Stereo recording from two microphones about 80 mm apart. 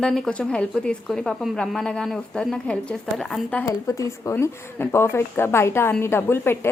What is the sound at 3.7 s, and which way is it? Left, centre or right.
Speech, left.